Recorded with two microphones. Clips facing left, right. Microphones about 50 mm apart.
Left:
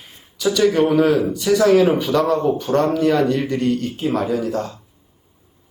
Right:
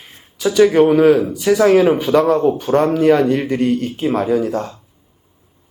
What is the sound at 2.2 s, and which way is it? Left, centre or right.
Speech, centre.